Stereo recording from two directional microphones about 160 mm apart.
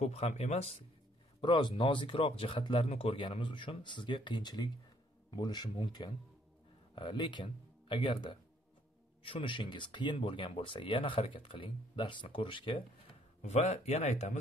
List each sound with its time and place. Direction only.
0.0 s speech: 45° left (ahead or behind)
1.4 s speech: 30° left (ahead or behind)
13.4 s speech: 45° left (ahead or behind)